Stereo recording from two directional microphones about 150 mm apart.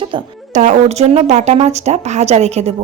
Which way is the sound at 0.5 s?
50° right (ahead or behind).